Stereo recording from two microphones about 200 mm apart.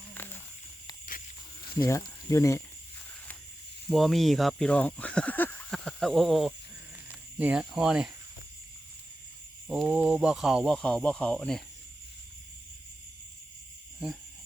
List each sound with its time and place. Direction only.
0.1 s snake: 10° left (ahead or behind)
1.8 s speech: 15° left (ahead or behind)
3.8 s speech: centre (ahead or behind)
9.6 s speech: 5° right (ahead or behind)